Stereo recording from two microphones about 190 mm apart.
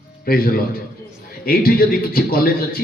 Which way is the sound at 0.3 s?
50° left (ahead or behind).